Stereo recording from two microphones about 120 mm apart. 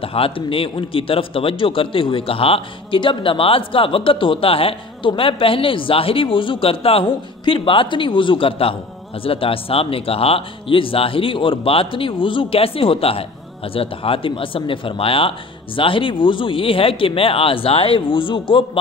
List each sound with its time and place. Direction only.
0.0 s a man's voice: 50° left (ahead or behind)